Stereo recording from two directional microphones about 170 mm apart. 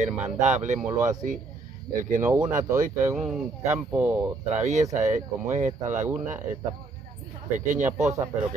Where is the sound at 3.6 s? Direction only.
10° right (ahead or behind).